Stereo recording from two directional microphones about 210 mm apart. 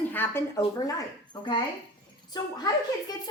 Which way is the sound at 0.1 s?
10° left (ahead or behind).